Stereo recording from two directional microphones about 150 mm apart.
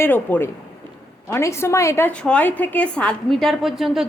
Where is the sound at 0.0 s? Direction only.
15° left (ahead or behind).